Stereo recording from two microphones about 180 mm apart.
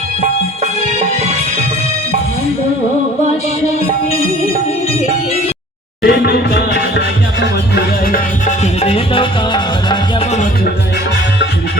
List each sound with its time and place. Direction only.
6.0 s music: 60° left (ahead or behind)
8.1 s music: 40° left (ahead or behind)